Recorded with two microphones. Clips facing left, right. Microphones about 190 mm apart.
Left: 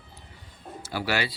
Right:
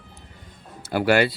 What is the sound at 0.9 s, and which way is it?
Speech, 55° right (ahead or behind).